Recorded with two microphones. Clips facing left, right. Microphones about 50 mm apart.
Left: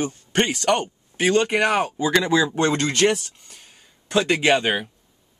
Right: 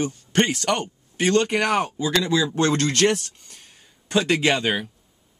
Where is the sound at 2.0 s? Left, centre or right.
Left.